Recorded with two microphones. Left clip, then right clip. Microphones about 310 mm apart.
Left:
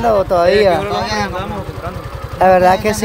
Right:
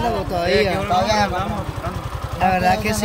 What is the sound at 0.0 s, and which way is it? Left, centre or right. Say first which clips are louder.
Speech: left 9 dB; centre.